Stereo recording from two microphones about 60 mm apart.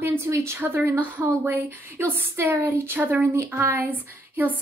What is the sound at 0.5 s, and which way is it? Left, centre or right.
A woman's voice, right.